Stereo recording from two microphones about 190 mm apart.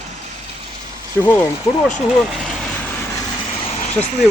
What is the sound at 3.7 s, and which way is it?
Vehicle, 40° left (ahead or behind).